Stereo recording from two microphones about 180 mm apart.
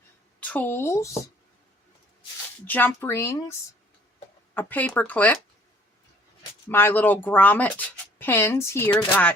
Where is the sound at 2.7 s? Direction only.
10° left (ahead or behind).